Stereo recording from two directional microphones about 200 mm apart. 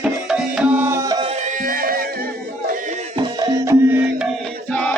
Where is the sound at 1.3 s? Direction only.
40° right (ahead or behind).